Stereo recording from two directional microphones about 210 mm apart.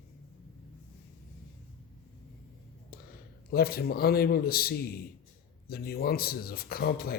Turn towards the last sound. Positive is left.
turn(degrees=45)  # may be behind; listen again after turning